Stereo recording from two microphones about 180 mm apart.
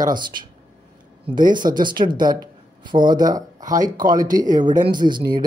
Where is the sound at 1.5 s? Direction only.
25° right (ahead or behind).